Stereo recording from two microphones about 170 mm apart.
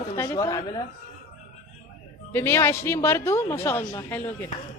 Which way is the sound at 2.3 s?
15° left (ahead or behind).